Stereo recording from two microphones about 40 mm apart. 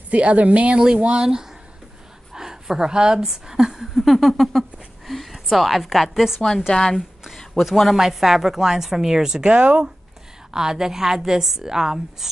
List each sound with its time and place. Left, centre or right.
0.1 s speech: right; by 6.4 s centre
6.7 s speech: centre
7.3 s a woman's voice: centre; by 9.8 s right
10.5 s a woman's voice: centre